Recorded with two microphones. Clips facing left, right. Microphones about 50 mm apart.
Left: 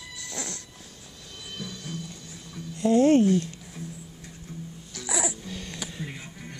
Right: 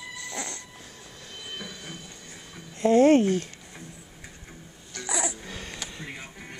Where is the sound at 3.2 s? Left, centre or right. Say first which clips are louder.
Left 3 dB; right.